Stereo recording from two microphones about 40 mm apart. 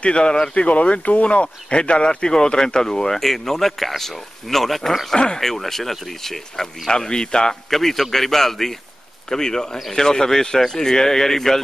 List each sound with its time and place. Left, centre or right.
0.0 s speech: left; by 5.1 s centre
5.1 s speech: centre
6.9 s speech: centre
7.7 s speech: centre